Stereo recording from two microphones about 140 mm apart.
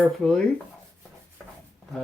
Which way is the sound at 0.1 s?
Centre (ahead or behind).